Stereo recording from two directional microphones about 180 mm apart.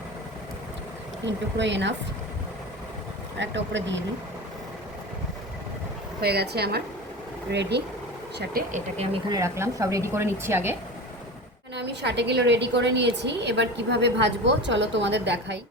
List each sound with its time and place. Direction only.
1.2 s a woman's voice: 75° right (ahead or behind)
3.3 s speech: 80° right
6.2 s a woman's voice: 65° right (ahead or behind)
8.7 s speech: 35° right (ahead or behind)
9.3 s speech: 15° right (ahead or behind)
11.7 s a woman's voice: 70° right (ahead or behind)